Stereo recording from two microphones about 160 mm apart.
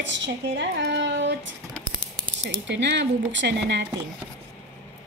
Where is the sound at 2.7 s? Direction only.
90° right.